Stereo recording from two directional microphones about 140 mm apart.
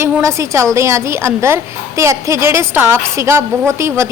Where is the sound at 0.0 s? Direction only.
20° right (ahead or behind).